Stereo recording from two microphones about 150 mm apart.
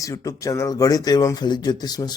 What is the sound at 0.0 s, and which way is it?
Speech, 20° left (ahead or behind).